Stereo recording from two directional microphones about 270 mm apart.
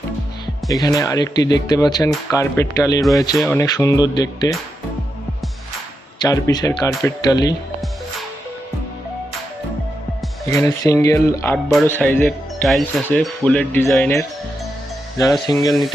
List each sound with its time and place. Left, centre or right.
0.7 s speech: centre
6.2 s speech: centre
10.4 s speech: centre
15.4 s speech: centre